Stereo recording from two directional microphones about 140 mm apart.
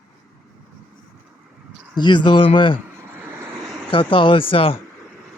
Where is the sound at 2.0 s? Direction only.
35° left (ahead or behind).